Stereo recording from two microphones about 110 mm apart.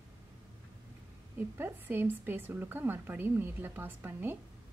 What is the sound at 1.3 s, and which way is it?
Speech, 20° right (ahead or behind).